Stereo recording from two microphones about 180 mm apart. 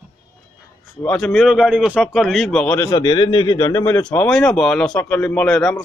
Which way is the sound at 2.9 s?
25° left (ahead or behind).